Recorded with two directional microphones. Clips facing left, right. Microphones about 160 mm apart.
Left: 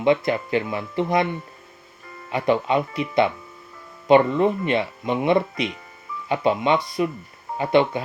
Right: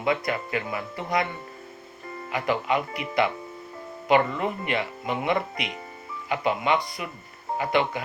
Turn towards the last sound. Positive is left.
turn(degrees=25)  # may be behind; listen again after turning